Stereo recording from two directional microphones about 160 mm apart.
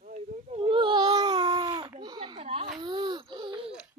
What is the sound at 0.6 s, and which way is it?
Baby cry, 30° right (ahead or behind).